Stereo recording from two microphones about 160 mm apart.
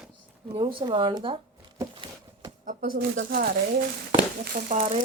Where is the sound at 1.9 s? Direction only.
30° right (ahead or behind).